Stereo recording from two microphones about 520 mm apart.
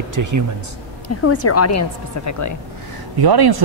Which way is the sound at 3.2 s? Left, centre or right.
Right.